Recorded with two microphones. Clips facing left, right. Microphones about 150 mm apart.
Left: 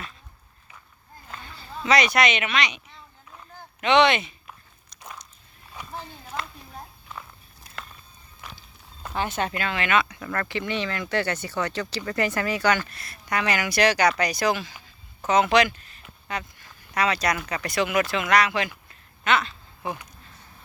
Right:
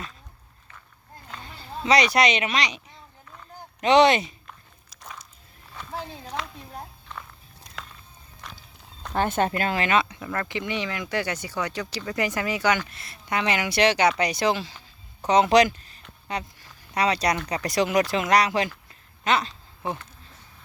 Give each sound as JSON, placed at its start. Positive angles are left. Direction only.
{"t": 1.4, "sound": "speech", "side_deg": -30}
{"t": 4.4, "sound": "walk", "side_deg": 0}
{"t": 5.8, "sound": "a sound", "side_deg": 10}
{"t": 7.1, "sound": "walk", "side_deg": 5}
{"t": 8.4, "sound": "horse", "side_deg": 5}
{"t": 9.1, "sound": "speech", "side_deg": -50}
{"t": 10.2, "sound": "speech", "side_deg": -15}